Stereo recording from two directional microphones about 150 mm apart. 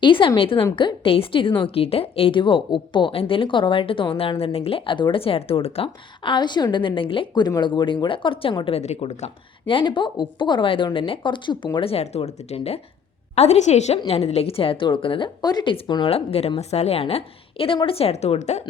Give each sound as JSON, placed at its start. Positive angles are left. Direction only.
{"t": 0.0, "sound": "a woman's voice", "side_deg": 35}
{"t": 9.6, "sound": "a woman's voice", "side_deg": 35}